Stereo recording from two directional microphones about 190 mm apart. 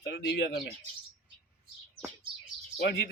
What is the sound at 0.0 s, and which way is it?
Speech, 65° left (ahead or behind).